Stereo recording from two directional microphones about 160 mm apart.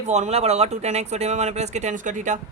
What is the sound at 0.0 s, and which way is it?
Speech, 45° right (ahead or behind).